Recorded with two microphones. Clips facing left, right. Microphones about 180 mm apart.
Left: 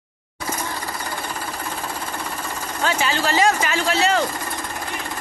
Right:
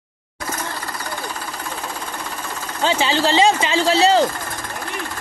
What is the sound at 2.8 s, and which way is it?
Speech, 30° right (ahead or behind).